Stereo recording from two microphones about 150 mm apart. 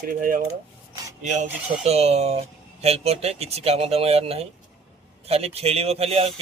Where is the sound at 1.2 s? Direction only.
55° right (ahead or behind).